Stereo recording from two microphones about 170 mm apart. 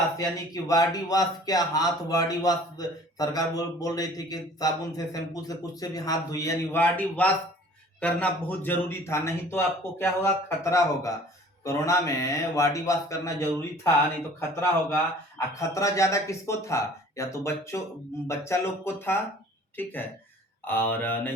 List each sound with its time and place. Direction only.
0.2 s a man's voice: 20° left (ahead or behind)